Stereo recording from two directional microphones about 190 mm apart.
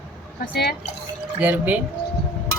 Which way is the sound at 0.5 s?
60° left (ahead or behind).